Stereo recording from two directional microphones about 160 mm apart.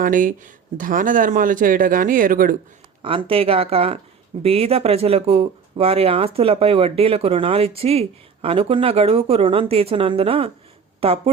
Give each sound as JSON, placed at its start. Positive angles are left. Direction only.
{"t": 0.0, "sound": "speech", "side_deg": -60}
{"t": 3.0, "sound": "speech", "side_deg": -35}